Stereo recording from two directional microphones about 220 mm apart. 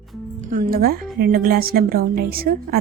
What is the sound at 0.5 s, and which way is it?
A woman's voice, 40° right (ahead or behind).